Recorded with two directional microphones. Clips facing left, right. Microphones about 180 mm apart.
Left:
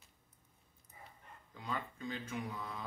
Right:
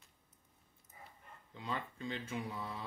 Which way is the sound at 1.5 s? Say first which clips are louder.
Even; 25° right (ahead or behind).